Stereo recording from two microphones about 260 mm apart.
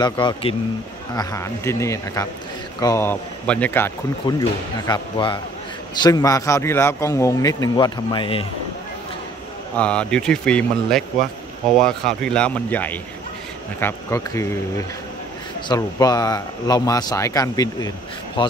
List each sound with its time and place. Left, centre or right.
0.0 s speech: centre
9.8 s speech: centre